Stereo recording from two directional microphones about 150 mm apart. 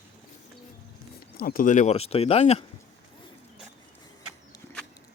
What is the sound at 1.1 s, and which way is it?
Speech, 75° left (ahead or behind).